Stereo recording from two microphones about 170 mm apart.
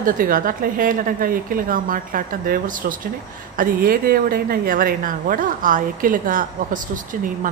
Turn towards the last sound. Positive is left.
turn(degrees=-50)  # may be behind; listen again after turning